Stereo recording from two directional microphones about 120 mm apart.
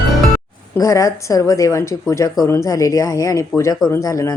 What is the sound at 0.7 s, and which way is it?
Speech, 25° left (ahead or behind).